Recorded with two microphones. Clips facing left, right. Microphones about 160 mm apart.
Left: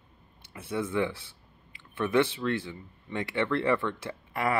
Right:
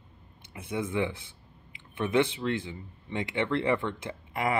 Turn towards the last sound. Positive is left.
turn(degrees=-20)  # may be behind; listen again after turning